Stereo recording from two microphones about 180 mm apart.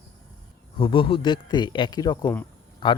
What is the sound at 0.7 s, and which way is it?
Speech, 30° left (ahead or behind).